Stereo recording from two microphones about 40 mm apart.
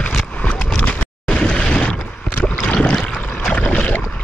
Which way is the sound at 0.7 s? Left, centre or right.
Left.